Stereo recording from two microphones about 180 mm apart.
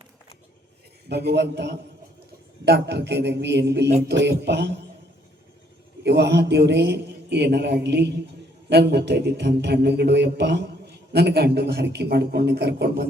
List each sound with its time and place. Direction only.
1.0 s a man's voice: 70° right (ahead or behind)
6.0 s a man's voice: 70° right (ahead or behind)